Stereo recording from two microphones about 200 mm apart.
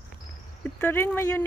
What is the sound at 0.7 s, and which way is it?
Speech, 10° left (ahead or behind).